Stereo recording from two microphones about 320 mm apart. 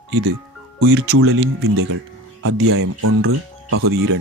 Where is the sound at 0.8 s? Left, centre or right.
Right.